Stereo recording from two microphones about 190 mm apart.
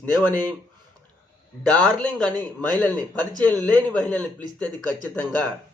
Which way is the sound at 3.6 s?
5° left (ahead or behind).